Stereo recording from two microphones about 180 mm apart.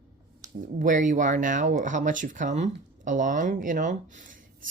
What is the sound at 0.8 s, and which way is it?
Speech, 45° right (ahead or behind).